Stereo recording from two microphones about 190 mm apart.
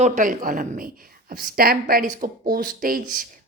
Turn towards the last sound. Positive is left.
turn(degrees=-50)  # may be behind; listen again after turning